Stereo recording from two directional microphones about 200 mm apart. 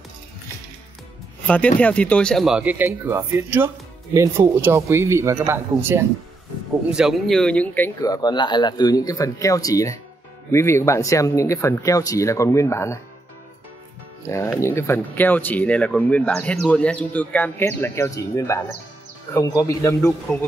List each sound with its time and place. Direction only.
1.8 s speech: 5° left (ahead or behind)
14.2 s speech: 15° left (ahead or behind)